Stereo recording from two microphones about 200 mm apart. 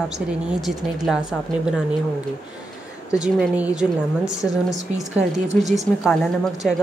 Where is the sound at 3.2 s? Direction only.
5° right (ahead or behind).